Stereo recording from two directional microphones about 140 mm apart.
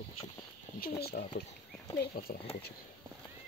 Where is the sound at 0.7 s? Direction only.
90° left.